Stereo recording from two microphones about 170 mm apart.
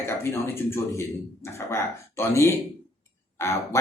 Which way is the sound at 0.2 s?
15° left (ahead or behind).